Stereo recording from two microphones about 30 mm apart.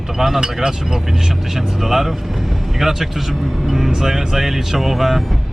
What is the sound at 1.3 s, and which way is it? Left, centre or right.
Speech, centre.